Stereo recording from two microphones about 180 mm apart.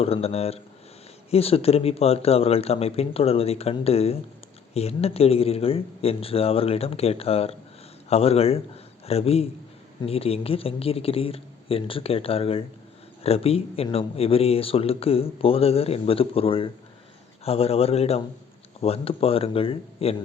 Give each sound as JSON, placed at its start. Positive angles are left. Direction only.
{"t": 0.0, "sound": "a man's voice", "side_deg": 35}